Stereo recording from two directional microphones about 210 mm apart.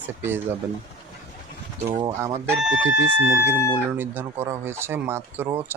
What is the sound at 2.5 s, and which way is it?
Speech, 5° right (ahead or behind).